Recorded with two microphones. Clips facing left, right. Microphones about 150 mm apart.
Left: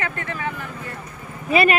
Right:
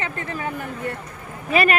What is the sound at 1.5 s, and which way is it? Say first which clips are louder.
Speech: left 2 dB; 40° right (ahead or behind).